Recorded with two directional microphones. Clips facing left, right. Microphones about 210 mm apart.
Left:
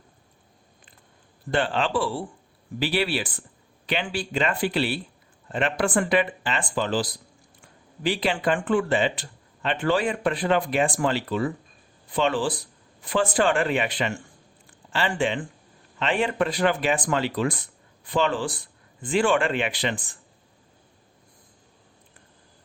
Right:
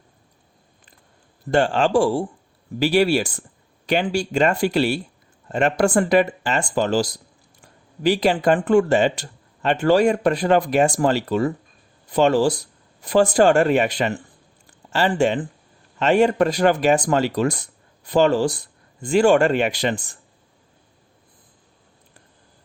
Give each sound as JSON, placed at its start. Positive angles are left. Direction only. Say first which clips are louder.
{"t": 1.5, "sound": "speech", "louder": "right 6 dB", "side_deg": -45}